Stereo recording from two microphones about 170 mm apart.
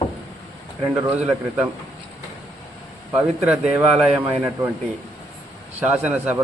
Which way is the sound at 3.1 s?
5° right (ahead or behind).